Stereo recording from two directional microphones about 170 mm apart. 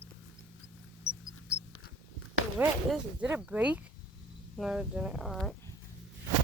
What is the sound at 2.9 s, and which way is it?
Speech, 5° right (ahead or behind).